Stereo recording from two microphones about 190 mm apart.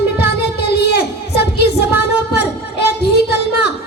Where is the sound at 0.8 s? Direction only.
60° left (ahead or behind).